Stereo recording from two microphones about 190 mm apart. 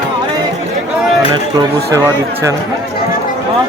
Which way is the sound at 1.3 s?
20° right (ahead or behind).